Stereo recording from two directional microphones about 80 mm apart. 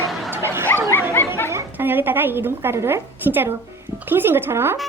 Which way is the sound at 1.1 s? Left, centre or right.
Left.